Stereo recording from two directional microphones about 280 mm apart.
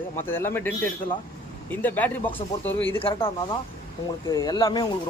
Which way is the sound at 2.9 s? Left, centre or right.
Centre.